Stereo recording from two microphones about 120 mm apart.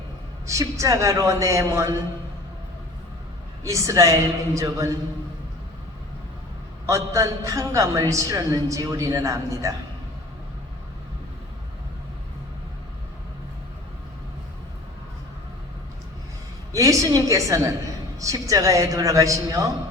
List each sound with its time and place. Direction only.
0.4 s a man's voice: 25° right (ahead or behind)
3.6 s a man's voice: 25° right (ahead or behind)
6.8 s a man's voice: 25° right (ahead or behind)
16.7 s a man's voice: 30° right (ahead or behind)